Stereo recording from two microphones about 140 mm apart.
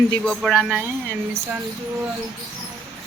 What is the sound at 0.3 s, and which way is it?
Speech, centre (ahead or behind).